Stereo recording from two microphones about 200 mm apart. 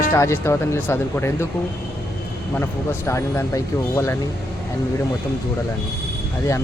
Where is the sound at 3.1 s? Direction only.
15° left (ahead or behind).